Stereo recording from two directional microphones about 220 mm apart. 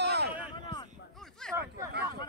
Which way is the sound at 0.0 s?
50° right (ahead or behind).